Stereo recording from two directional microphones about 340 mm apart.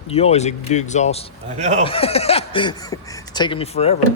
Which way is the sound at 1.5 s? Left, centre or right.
Centre.